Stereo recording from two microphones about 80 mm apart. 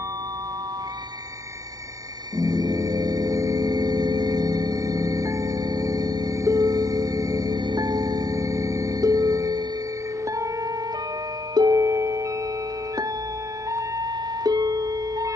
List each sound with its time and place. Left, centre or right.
2.3 s gong: right
10.2 s music: right
11.5 s music: right
11.8 s singing bowl: right
13.7 s music: right